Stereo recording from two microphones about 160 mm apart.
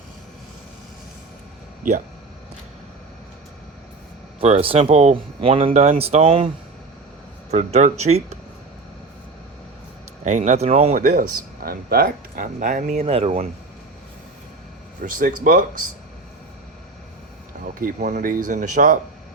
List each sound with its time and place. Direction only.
4.4 s speech: 40° right (ahead or behind)
7.5 s speech: 45° right (ahead or behind)
10.2 s speech: 50° right (ahead or behind)
11.1 s speech: 70° right (ahead or behind); by 13.3 s 40° right (ahead or behind)
15.0 s speech: 60° right (ahead or behind)
17.7 s speech: 55° right (ahead or behind)